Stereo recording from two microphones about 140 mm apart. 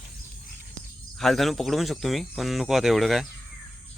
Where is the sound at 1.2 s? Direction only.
Centre (ahead or behind).